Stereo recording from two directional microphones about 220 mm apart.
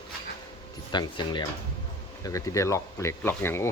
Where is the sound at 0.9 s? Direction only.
20° left (ahead or behind).